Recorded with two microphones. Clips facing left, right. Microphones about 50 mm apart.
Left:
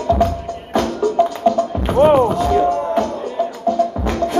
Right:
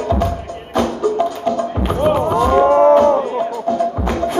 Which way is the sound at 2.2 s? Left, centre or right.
Right.